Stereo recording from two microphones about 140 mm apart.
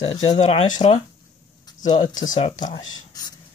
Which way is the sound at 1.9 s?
30° left (ahead or behind).